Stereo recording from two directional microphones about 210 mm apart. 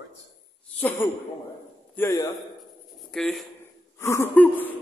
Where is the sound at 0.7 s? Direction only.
10° left (ahead or behind).